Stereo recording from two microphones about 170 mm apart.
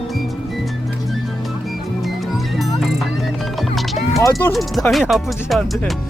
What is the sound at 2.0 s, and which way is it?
Music, centre (ahead or behind).